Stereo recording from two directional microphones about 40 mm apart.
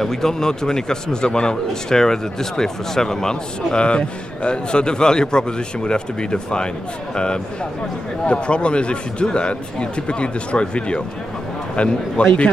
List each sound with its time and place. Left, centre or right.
0.0 s speech: centre
3.7 s a man's voice: left
8.3 s a man's voice: left